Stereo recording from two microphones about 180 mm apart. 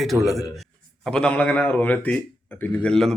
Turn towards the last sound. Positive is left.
turn(degrees=5)  # may be behind; listen again after turning